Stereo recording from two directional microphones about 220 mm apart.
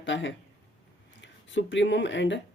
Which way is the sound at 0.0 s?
55° left (ahead or behind).